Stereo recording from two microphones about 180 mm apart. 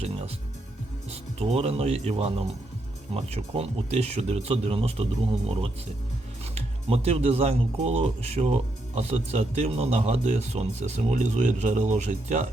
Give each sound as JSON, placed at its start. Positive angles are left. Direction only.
{"t": 1.1, "sound": "speech", "side_deg": -35}